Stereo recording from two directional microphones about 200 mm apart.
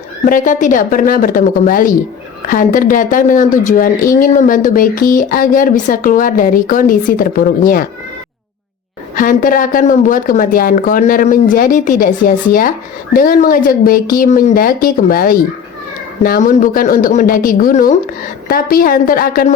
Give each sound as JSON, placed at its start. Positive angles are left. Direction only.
{"t": 0.3, "sound": "speech", "side_deg": 40}
{"t": 9.1, "sound": "speech", "side_deg": 45}